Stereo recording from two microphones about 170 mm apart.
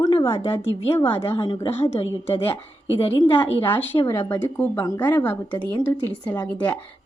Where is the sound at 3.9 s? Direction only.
25° left (ahead or behind); by 6.7 s 10° left (ahead or behind).